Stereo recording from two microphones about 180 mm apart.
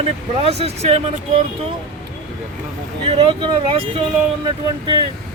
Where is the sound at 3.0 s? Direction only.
30° right (ahead or behind).